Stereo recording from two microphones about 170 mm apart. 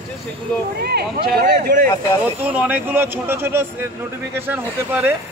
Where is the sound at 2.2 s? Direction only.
10° right (ahead or behind).